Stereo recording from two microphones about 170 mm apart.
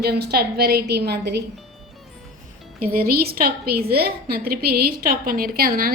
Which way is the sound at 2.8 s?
60° right (ahead or behind).